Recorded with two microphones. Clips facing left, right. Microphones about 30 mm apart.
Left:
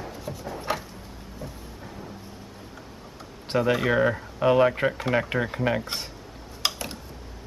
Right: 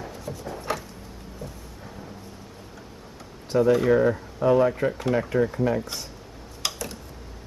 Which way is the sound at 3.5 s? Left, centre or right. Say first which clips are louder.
Right 3 dB; left.